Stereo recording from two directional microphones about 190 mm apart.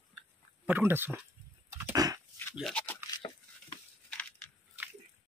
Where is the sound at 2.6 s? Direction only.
5° left (ahead or behind).